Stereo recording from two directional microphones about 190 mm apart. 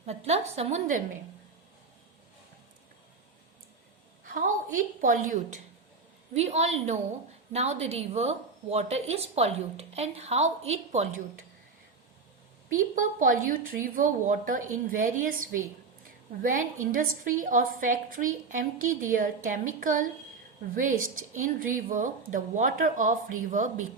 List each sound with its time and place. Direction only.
0.0 s a woman's voice: 35° right (ahead or behind)
4.3 s a woman's voice: 45° right (ahead or behind)
6.3 s a woman's voice: 35° right (ahead or behind)
12.6 s a woman's voice: 45° right (ahead or behind)